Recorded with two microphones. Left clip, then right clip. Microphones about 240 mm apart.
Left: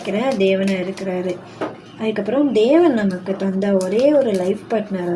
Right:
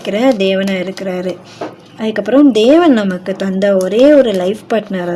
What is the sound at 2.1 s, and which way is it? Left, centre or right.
Speech, right.